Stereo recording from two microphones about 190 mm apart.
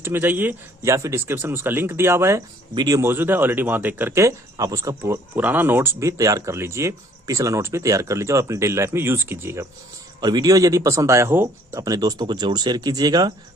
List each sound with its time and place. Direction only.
0.0 s speech: 10° right (ahead or behind)